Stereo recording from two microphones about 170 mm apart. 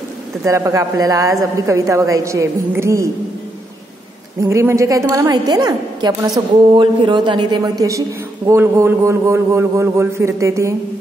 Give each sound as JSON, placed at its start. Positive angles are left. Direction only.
{"t": 0.4, "sound": "a woman's voice", "side_deg": -15}
{"t": 4.4, "sound": "a woman's voice", "side_deg": -15}